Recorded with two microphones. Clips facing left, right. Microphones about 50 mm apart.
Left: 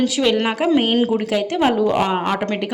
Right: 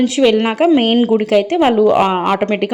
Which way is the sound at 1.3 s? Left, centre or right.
Right.